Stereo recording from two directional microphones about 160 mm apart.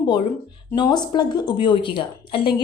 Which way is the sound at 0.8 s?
25° left (ahead or behind).